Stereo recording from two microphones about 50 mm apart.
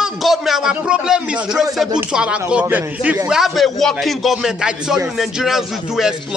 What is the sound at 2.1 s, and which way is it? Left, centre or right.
Speech, centre.